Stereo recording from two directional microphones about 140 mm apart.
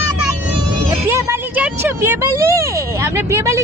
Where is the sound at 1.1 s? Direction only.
15° right (ahead or behind).